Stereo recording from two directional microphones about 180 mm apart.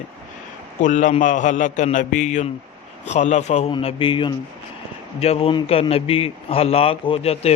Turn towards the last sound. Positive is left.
turn(degrees=35)  # may be behind; listen again after turning